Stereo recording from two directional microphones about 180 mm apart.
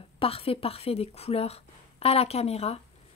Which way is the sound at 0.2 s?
30° left (ahead or behind).